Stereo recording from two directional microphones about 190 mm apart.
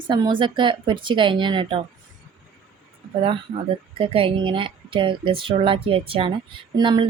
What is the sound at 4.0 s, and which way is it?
A woman's voice, 25° right (ahead or behind).